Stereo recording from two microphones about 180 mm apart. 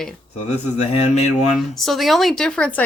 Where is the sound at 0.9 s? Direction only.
35° left (ahead or behind).